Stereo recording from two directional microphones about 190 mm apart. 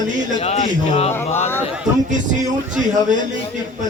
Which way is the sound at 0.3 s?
30° left (ahead or behind).